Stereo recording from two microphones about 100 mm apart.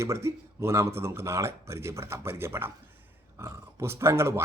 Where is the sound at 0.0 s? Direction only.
30° right (ahead or behind).